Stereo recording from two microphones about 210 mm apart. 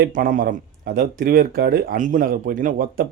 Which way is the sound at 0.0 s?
40° right (ahead or behind).